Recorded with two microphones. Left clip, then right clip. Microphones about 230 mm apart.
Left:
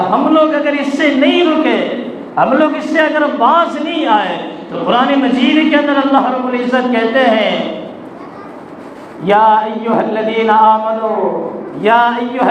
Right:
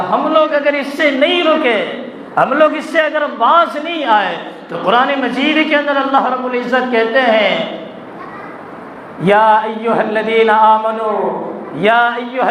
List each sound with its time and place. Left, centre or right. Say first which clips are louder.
0.1 s a sound: right 1 dB; right
2.3 s a man's voice: even; right
9.2 s a man's voice: left 1 dB; right
11.8 s a man's voice: left 1 dB; right